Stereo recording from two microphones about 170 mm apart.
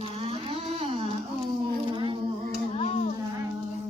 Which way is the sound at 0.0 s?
35° right (ahead or behind).